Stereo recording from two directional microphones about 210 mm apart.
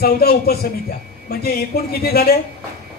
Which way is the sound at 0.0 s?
45° left (ahead or behind).